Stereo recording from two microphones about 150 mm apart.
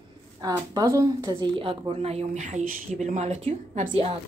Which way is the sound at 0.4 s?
25° right (ahead or behind).